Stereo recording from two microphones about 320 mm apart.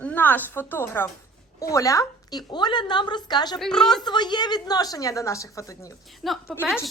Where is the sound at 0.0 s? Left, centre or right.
Centre.